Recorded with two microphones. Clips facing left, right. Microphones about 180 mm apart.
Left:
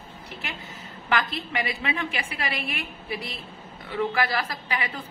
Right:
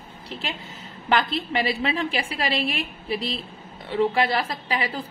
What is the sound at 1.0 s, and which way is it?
A woman's voice, 30° right (ahead or behind).